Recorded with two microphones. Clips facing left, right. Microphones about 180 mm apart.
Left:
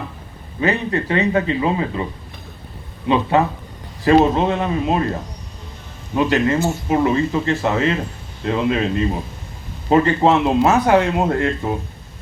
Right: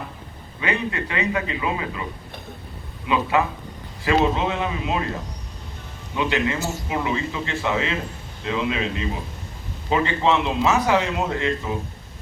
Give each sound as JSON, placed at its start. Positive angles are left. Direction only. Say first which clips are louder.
{"t": 0.6, "sound": "speech", "louder": "left 6 dB", "side_deg": 35}
{"t": 3.1, "sound": "speech", "louder": "left 5 dB", "side_deg": 35}
{"t": 6.1, "sound": "speech", "louder": "left 6 dB", "side_deg": 40}